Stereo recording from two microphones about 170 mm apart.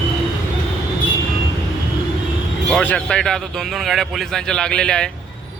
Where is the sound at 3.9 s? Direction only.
Centre (ahead or behind).